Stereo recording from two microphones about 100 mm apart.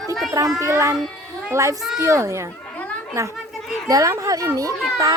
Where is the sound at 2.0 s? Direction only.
30° right (ahead or behind).